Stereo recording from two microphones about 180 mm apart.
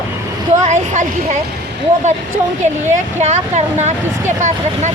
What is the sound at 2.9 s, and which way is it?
Speech, 40° right (ahead or behind).